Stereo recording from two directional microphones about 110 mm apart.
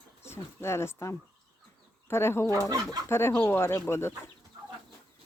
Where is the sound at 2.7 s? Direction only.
35° right (ahead or behind).